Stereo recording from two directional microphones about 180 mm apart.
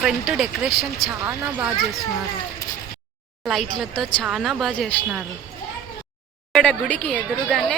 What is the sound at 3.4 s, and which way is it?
A woman's voice, centre (ahead or behind).